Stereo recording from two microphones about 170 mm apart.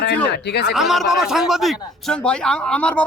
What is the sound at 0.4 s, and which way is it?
Speech, 75° left (ahead or behind).